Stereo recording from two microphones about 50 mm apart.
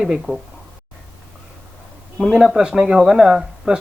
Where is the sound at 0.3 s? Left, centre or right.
Right.